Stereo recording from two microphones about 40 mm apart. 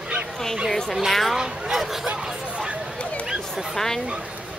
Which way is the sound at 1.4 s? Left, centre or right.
Centre.